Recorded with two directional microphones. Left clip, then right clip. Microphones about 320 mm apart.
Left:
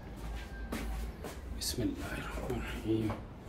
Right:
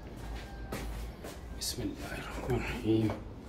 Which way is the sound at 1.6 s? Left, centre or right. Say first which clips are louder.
Left 1 dB; centre.